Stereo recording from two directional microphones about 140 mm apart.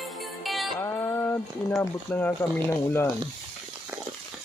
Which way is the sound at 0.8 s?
20° left (ahead or behind).